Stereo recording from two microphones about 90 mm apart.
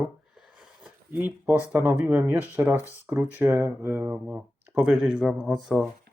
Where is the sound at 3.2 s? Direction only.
20° right (ahead or behind).